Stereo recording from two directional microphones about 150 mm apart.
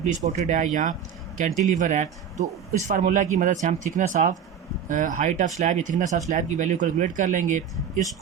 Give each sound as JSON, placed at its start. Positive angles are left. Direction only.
{"t": 0.3, "sound": "speech", "side_deg": -55}